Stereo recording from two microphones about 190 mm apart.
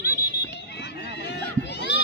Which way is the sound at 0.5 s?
60° left (ahead or behind).